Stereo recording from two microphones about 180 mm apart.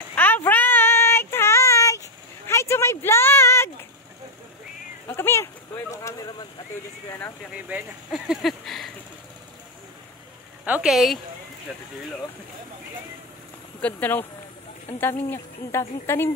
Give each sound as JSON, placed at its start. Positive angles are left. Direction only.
{"t": 0.1, "sound": "child singing", "side_deg": 10}
{"t": 2.4, "sound": "a sound", "side_deg": 15}
{"t": 5.0, "sound": "a sound", "side_deg": 15}
{"t": 7.1, "sound": "speech", "side_deg": 15}
{"t": 7.6, "sound": "speech", "side_deg": -5}
{"t": 10.6, "sound": "speech", "side_deg": -5}
{"t": 13.7, "sound": "speech", "side_deg": 10}